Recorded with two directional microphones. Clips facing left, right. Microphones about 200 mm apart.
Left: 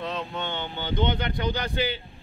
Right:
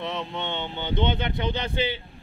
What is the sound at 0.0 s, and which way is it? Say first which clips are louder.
Speech: even; 20° right (ahead or behind).